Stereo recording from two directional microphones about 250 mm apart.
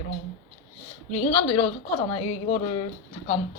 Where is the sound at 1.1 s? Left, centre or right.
Left.